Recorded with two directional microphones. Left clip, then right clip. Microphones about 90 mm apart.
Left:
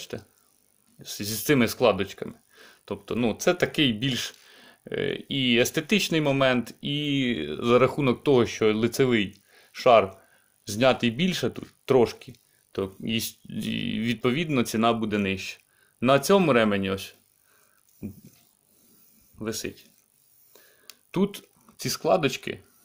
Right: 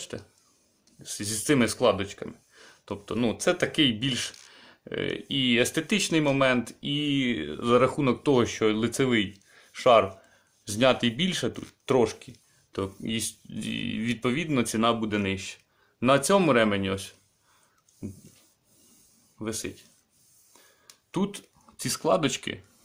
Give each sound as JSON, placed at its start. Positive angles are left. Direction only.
{"t": 0.0, "sound": "a sound", "side_deg": 20}
{"t": 0.9, "sound": "speech", "side_deg": 35}
{"t": 19.4, "sound": "speech", "side_deg": 35}
{"t": 21.1, "sound": "speech", "side_deg": 30}
{"t": 21.7, "sound": "speech", "side_deg": 15}